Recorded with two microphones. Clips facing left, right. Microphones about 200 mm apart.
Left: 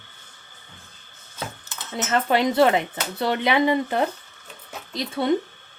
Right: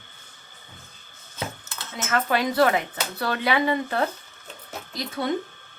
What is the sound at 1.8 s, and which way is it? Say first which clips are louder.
Speech: left 3 dB; 20° left (ahead or behind).